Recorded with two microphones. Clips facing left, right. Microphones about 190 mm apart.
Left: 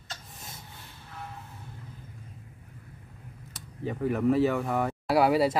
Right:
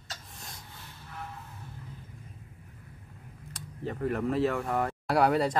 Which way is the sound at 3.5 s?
5° left (ahead or behind).